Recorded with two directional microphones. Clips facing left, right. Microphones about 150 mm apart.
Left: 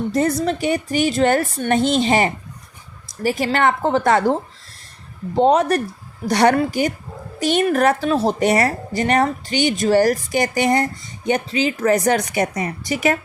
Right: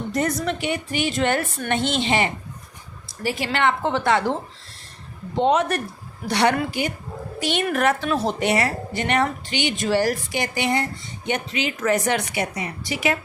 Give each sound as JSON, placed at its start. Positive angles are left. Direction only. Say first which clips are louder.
{"t": 0.1, "sound": "a woman's voice", "louder": "left 3 dB", "side_deg": 30}